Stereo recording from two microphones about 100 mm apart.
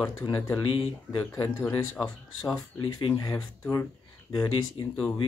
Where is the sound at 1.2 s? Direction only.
35° left (ahead or behind).